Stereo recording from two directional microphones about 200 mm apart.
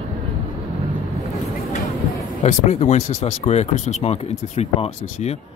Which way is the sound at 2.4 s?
35° left (ahead or behind).